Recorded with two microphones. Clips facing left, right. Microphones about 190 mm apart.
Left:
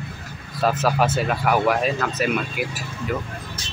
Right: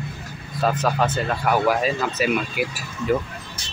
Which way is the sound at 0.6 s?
5° left (ahead or behind).